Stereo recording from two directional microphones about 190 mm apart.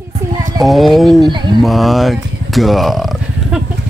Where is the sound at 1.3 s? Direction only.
25° right (ahead or behind).